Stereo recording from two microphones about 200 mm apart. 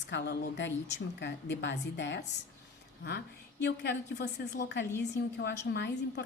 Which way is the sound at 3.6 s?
55° left (ahead or behind).